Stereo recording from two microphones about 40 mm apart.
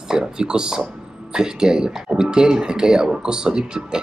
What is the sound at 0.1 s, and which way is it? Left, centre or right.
Speech, centre.